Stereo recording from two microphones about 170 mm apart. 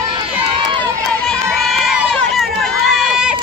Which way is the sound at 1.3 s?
Centre (ahead or behind).